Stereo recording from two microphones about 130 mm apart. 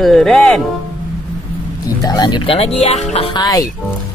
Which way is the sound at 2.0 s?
35° left (ahead or behind).